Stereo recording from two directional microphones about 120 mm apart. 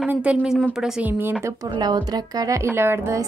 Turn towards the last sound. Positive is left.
turn(degrees=-20)  # may be behind; listen again after turning